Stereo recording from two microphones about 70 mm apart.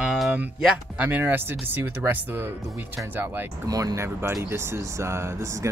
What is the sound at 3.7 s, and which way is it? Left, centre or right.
Speech, right.